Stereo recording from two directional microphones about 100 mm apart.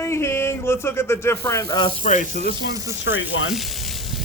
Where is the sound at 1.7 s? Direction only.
50° left (ahead or behind).